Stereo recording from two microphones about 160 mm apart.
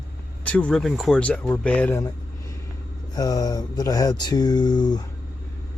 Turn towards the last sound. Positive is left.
turn(degrees=25)  # may be behind; listen again after turning